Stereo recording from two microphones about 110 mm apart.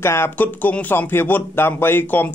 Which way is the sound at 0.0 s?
25° left (ahead or behind).